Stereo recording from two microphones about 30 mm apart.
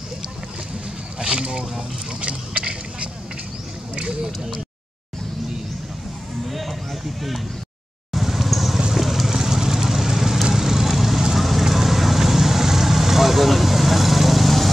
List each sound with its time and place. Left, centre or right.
1.4 s speech: right
2.6 s a sound: right
4.0 s speech: right
6.4 s a sound: centre
8.1 s vehicle: centre
9.4 s vehicle: centre